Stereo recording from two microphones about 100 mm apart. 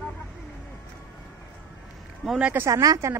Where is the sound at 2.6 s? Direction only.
35° right (ahead or behind).